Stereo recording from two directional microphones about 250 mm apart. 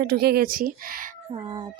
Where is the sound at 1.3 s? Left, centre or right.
Right.